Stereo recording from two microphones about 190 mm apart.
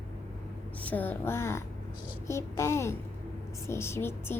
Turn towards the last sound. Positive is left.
turn(degrees=10)  # may be behind; listen again after turning